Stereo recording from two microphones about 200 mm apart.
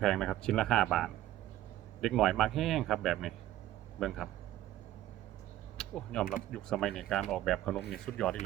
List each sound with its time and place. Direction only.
0.0 s a man's voice: centre (ahead or behind)
5.7 s typing: 5° left (ahead or behind)
6.5 s a man's voice: 5° left (ahead or behind)